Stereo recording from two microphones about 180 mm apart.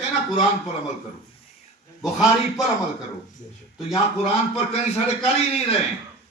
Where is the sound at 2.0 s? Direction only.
Centre (ahead or behind).